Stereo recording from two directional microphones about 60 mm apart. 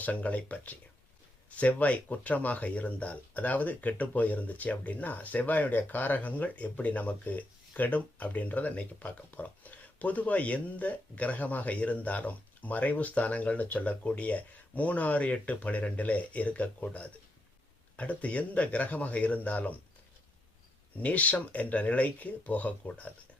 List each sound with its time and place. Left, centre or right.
0.0 s speech: left
21.0 s speech: left